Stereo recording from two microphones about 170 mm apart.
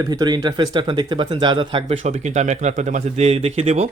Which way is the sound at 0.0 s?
25° right (ahead or behind).